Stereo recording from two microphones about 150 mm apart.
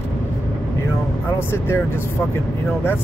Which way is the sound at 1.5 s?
15° left (ahead or behind).